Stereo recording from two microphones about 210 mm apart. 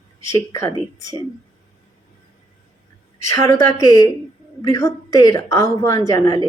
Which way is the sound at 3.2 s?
15° left (ahead or behind).